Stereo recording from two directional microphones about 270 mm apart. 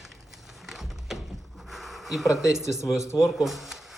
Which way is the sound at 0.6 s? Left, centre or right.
Centre.